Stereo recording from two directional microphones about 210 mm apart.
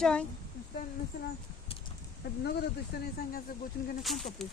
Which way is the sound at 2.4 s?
50° left (ahead or behind).